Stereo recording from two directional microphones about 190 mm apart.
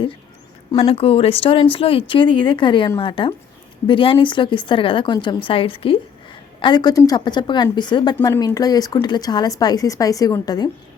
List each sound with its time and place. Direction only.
0.7 s speech: 30° left (ahead or behind)